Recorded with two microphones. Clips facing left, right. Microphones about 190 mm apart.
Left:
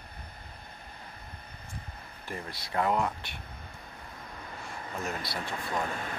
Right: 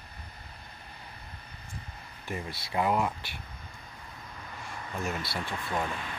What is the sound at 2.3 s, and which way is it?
Speech, 10° right (ahead or behind).